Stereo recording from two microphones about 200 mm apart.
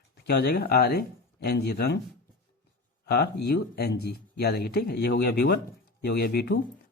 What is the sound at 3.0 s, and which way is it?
Speech, 55° left (ahead or behind).